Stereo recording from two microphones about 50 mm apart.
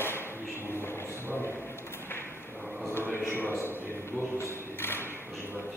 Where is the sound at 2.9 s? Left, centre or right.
Left.